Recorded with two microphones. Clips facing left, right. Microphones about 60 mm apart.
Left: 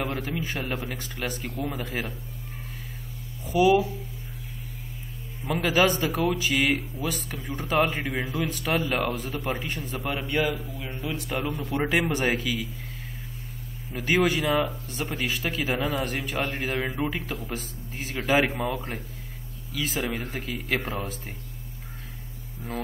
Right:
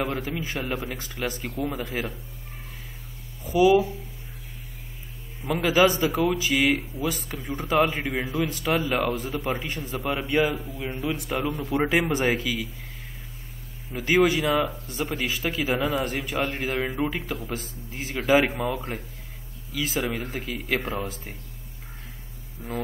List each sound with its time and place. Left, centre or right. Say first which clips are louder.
0.0 s speech: right 1 dB; centre
3.4 s speech: right 2 dB; centre
5.4 s speech: right 2 dB; centre
10.3 s speech: right 3 dB; centre
13.9 s speech: right 3 dB; centre
14.4 s speech: right 1 dB; centre